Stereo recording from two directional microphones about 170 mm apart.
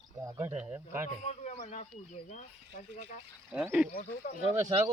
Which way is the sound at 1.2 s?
40° left (ahead or behind).